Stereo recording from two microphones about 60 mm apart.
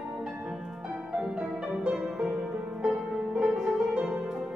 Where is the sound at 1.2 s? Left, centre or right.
Centre.